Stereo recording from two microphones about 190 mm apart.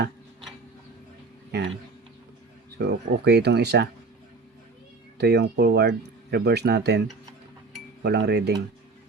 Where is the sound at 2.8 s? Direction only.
60° right (ahead or behind).